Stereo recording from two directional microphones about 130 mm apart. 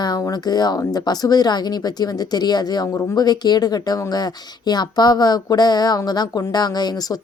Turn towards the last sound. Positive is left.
turn(degrees=30)  # may be behind; listen again after turning